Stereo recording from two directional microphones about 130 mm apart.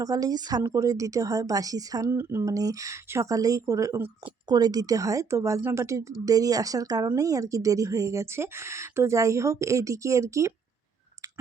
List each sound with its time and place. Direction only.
0.0 s speech: 30° right (ahead or behind)
4.3 s speech: 30° right (ahead or behind)